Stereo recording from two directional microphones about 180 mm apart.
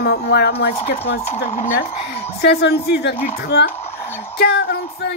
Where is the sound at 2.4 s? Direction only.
65° left (ahead or behind).